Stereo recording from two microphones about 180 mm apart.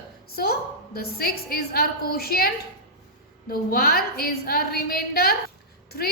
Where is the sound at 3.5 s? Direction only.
55° left (ahead or behind).